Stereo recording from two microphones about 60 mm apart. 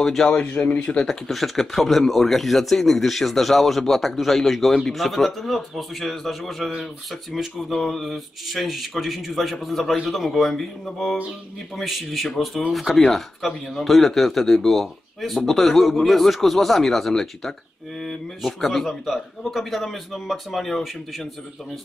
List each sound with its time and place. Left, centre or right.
0.0 s speech: centre
0.3 s speech: left
1.0 s speech: centre